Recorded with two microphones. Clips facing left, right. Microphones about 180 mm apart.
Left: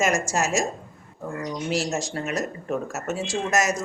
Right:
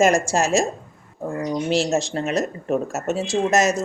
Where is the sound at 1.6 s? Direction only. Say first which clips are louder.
Right 5 dB; 25° right (ahead or behind).